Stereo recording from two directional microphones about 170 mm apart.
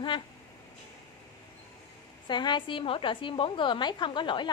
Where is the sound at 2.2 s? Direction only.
25° left (ahead or behind).